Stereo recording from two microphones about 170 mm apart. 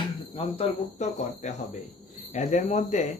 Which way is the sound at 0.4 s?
35° left (ahead or behind).